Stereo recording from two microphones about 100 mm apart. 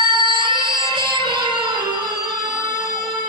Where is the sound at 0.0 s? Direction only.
55° right (ahead or behind).